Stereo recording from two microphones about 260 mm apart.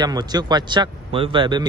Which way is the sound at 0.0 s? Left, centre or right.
Centre.